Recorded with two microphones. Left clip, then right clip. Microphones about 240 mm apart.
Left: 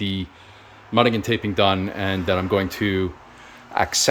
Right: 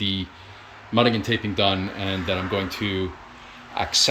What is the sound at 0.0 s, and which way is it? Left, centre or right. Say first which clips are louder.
Speech: right 2 dB; centre.